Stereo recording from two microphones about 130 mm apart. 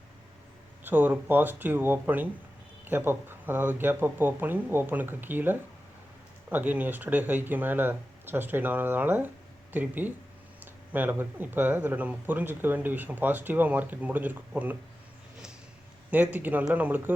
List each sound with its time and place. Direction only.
0.9 s speech: 15° right (ahead or behind)
16.0 s speech: 10° right (ahead or behind)